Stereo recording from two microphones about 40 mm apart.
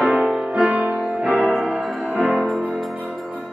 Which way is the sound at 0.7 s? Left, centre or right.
Right.